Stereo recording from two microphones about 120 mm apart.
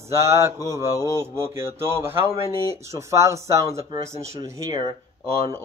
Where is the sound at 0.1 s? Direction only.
25° right (ahead or behind).